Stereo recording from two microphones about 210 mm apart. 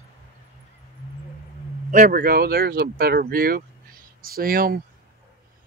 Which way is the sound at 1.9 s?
40° right (ahead or behind).